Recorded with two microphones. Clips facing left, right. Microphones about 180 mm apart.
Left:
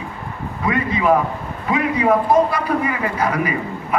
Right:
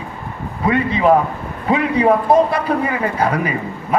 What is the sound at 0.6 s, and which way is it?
A man's voice, 30° right (ahead or behind).